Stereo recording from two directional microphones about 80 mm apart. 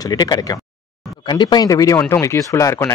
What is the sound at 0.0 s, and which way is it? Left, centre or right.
Speech, left.